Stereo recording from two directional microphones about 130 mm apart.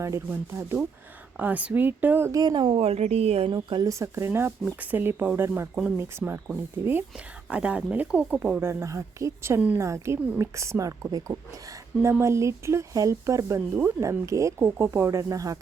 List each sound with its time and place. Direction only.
0.0 s speech: 20° right (ahead or behind)
2.4 s speech: 35° right (ahead or behind)
2.8 s a woman's voice: 55° right (ahead or behind)
3.5 s speech: 35° right (ahead or behind); by 6.4 s 20° right (ahead or behind)
7.5 s speech: 10° right (ahead or behind)
8.6 s speech: 20° right (ahead or behind)
9.6 s speech: 10° right (ahead or behind)
9.8 s speech: 20° right (ahead or behind)